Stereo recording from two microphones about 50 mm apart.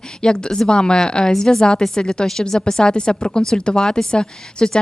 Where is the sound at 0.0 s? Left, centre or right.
Centre.